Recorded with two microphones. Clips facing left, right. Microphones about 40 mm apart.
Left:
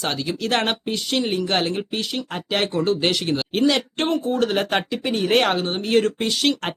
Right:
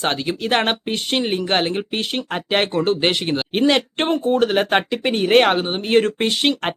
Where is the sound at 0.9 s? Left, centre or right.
Right.